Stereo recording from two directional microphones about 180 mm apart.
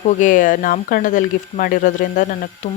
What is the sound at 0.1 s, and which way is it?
Speech, 45° left (ahead or behind).